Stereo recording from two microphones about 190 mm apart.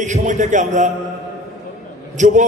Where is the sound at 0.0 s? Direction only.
40° right (ahead or behind).